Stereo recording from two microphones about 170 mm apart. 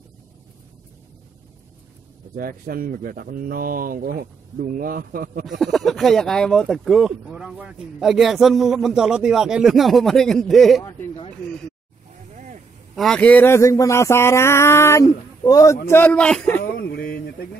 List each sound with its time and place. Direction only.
2.3 s speech: 60° right (ahead or behind)
5.6 s speech: centre (ahead or behind)
12.9 s speech: 5° left (ahead or behind); by 15.8 s 20° left (ahead or behind)
15.9 s speech: 10° left (ahead or behind)
16.6 s a sound: 70° left (ahead or behind)